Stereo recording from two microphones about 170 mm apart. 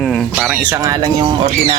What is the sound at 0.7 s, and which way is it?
Speech, 20° right (ahead or behind).